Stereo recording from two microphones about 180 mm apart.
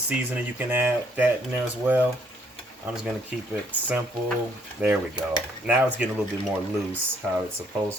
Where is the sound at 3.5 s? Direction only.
10° right (ahead or behind).